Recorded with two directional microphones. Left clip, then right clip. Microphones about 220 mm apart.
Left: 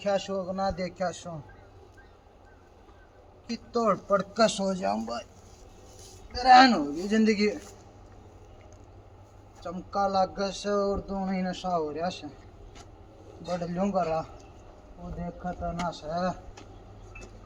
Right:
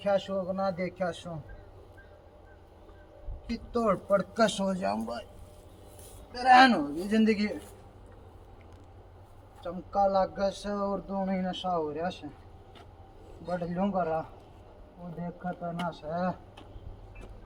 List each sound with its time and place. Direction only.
0.0 s a man's voice: centre (ahead or behind)
3.4 s a man's voice: centre (ahead or behind)
6.3 s a man's voice: 5° right (ahead or behind)
9.6 s speech: 5° left (ahead or behind)
13.4 s a man's voice: centre (ahead or behind)